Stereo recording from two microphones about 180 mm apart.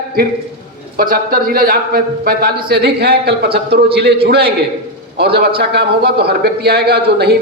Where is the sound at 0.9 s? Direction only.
55° right (ahead or behind).